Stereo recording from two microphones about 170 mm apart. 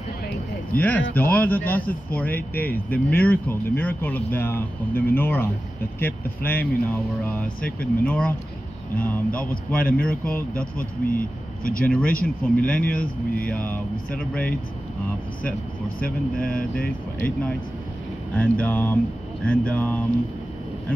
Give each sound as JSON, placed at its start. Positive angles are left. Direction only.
{"t": 0.7, "sound": "speech", "side_deg": 10}
{"t": 10.8, "sound": "speech", "side_deg": 55}
{"t": 11.8, "sound": "speech", "side_deg": 5}
{"t": 17.2, "sound": "speech", "side_deg": 10}